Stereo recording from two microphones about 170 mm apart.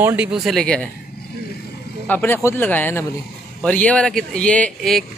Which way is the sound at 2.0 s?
10° left (ahead or behind).